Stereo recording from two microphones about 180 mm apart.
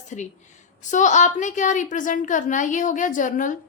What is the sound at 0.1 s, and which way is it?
A woman's voice, 40° left (ahead or behind).